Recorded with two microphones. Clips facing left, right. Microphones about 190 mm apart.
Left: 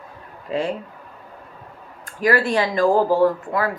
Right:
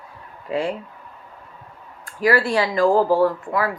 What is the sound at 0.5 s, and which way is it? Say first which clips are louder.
Speech: even; 20° left (ahead or behind).